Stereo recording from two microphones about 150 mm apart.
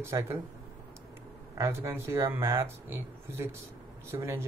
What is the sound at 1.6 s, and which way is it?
Speech, 15° right (ahead or behind).